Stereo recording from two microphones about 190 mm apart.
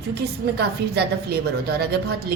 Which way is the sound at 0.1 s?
60° right (ahead or behind).